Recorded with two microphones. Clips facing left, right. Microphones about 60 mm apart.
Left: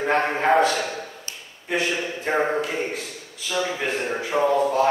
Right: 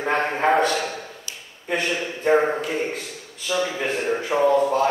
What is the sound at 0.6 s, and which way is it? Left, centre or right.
A man's voice, centre.